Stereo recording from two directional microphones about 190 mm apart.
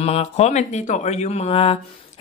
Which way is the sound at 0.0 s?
35° left (ahead or behind).